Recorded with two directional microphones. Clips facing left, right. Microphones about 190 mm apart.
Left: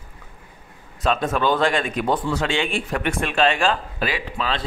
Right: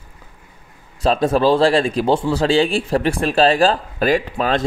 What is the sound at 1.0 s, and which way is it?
A man's voice, 35° right (ahead or behind).